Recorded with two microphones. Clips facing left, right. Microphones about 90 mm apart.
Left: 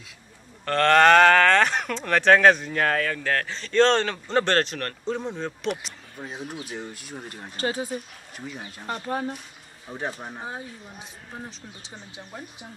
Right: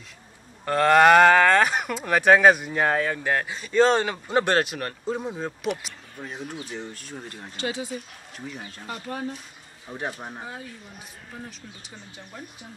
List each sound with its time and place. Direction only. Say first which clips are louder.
0.7 s speech: right 1 dB; 10° right (ahead or behind)
6.2 s speech: even; 15° left (ahead or behind)
7.5 s speech: left 3 dB; 40° left (ahead or behind)
8.5 s speech: even; 5° left (ahead or behind)
8.8 s speech: left 4 dB; 40° left (ahead or behind)
9.8 s speech: even; centre (ahead or behind)
10.4 s speech: left 2 dB; 25° left (ahead or behind)